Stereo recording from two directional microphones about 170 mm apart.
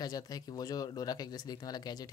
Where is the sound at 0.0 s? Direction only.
20° left (ahead or behind).